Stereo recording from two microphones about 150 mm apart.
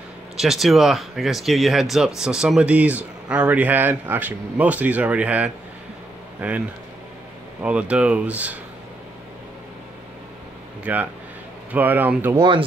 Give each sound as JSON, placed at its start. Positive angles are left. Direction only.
{"t": 0.4, "sound": "speech", "side_deg": 0}
{"t": 7.6, "sound": "speech", "side_deg": -10}
{"t": 10.8, "sound": "speech", "side_deg": -10}
{"t": 12.4, "sound": "speech", "side_deg": -35}